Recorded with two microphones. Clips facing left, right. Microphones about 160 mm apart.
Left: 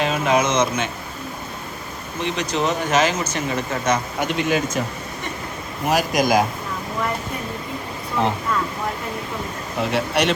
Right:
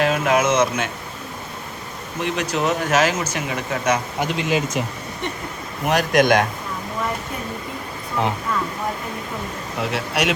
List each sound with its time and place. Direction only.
0.0 s speech: 5° right (ahead or behind)
2.2 s speech: 5° right (ahead or behind)
4.4 s speech: 20° right (ahead or behind)
5.8 s speech: centre (ahead or behind)
9.8 s speech: 5° right (ahead or behind)